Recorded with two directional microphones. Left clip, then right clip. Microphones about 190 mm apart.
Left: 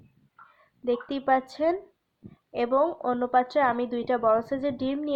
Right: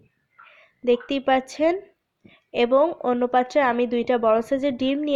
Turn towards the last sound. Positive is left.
turn(degrees=-35)  # may be behind; listen again after turning